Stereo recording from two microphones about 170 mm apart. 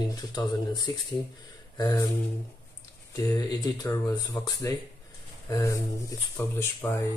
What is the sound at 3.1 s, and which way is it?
A man's voice, 20° left (ahead or behind).